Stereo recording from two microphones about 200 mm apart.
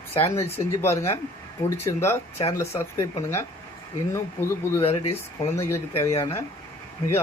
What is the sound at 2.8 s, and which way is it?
Speech, 15° left (ahead or behind).